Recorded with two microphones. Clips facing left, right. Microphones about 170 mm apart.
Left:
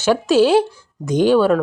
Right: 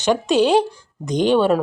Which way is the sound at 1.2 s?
20° right (ahead or behind).